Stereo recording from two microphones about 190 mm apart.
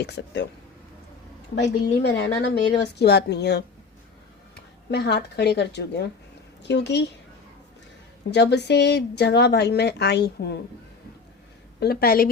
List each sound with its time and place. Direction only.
0.0 s speech: 65° left (ahead or behind)
1.5 s speech: 65° left (ahead or behind)
4.9 s a woman's voice: 60° left (ahead or behind)
8.3 s speech: 65° left (ahead or behind)
11.8 s a woman's voice: 55° left (ahead or behind)